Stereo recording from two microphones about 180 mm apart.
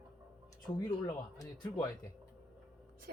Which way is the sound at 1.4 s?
20° left (ahead or behind).